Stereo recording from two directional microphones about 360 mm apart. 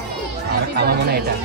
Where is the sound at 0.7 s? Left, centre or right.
Right.